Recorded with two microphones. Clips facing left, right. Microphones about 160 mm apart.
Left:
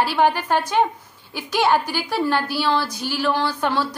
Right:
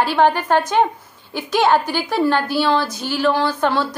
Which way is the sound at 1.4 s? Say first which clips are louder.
Right 3 dB; 10° left (ahead or behind).